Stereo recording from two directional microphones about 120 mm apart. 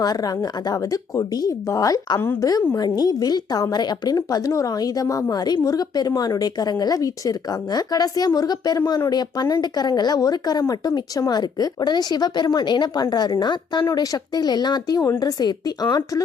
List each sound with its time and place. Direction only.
0.0 s speech: 30° left (ahead or behind)